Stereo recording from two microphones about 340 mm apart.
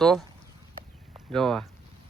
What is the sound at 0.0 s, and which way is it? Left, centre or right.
Speech, centre.